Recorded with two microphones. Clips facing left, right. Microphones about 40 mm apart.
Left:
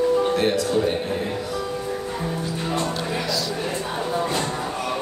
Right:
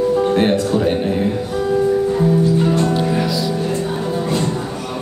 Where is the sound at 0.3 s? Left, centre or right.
Right.